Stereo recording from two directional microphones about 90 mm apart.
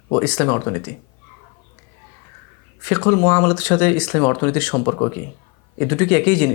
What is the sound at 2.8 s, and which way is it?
Speech, 20° left (ahead or behind).